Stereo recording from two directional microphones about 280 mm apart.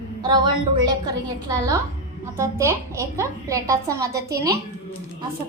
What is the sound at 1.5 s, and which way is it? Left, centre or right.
A woman's voice, centre.